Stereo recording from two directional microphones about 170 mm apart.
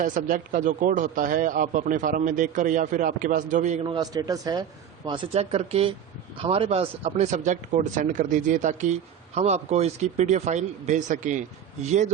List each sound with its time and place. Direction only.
0.0 s speech: 50° right (ahead or behind)
3.8 s speech: 25° right (ahead or behind); by 12.0 s 45° right (ahead or behind)